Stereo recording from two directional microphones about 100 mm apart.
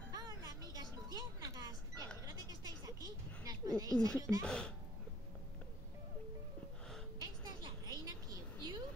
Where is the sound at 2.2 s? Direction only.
45° right (ahead or behind).